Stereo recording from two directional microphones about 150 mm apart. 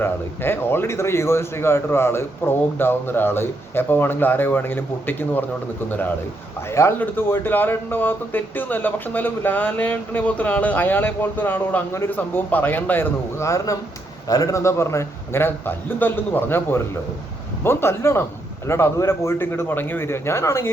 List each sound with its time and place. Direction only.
0.0 s speech: 15° left (ahead or behind)